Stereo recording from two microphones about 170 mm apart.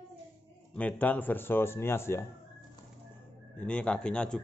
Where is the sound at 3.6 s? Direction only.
5° left (ahead or behind).